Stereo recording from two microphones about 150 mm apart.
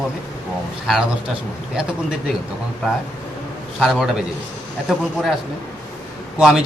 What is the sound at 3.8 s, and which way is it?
Speech, 5° right (ahead or behind).